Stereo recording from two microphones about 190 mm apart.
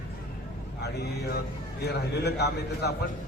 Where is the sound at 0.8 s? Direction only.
60° left (ahead or behind).